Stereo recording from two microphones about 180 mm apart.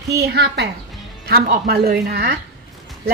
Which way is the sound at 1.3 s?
60° right (ahead or behind).